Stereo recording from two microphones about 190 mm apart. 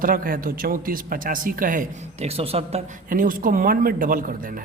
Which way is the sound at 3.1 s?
45° right (ahead or behind).